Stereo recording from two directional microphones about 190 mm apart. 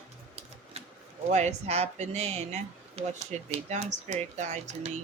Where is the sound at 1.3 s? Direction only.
35° right (ahead or behind).